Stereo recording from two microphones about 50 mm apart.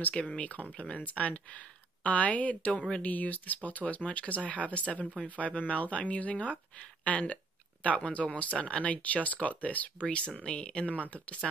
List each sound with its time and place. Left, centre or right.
0.1 s speech: left